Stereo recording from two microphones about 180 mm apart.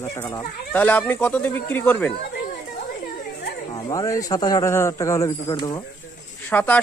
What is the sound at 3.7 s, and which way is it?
Speech, 20° left (ahead or behind).